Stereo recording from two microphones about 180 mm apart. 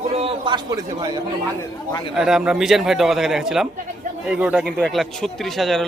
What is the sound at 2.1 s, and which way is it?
A man's voice, 5° right (ahead or behind).